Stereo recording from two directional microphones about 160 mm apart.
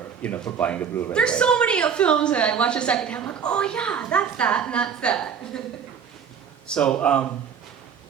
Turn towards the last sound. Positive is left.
turn(degrees=5)  # may be behind; listen again after turning